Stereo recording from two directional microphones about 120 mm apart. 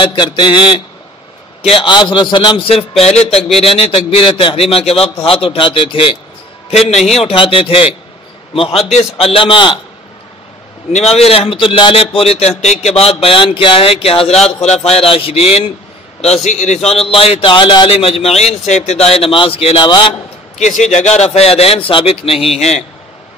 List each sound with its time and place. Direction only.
0.0 s speech: 45° left (ahead or behind)
1.9 s a man's voice: 40° left (ahead or behind)
3.0 s speech: 60° left (ahead or behind)
6.7 s a man's voice: 60° left (ahead or behind); by 9.8 s 45° left (ahead or behind)
10.9 s speech: 65° left (ahead or behind)
16.4 s speech: 75° left (ahead or behind); by 20.2 s 40° left (ahead or behind)
20.5 s speech: 75° left (ahead or behind); by 22.4 s 55° left (ahead or behind)